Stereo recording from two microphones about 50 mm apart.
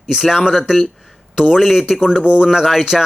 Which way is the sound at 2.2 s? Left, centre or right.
Centre.